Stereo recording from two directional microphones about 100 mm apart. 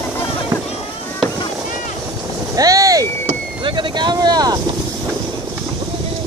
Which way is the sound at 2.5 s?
35° right (ahead or behind).